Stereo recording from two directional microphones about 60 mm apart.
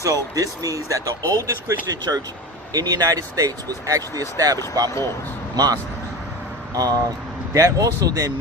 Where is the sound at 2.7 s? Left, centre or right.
Right.